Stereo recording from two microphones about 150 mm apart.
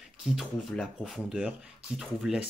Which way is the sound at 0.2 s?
Centre (ahead or behind).